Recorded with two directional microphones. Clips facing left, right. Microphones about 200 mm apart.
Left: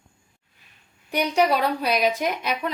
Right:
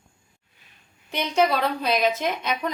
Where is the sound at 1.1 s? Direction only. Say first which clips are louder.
Left 1 dB; 15° left (ahead or behind).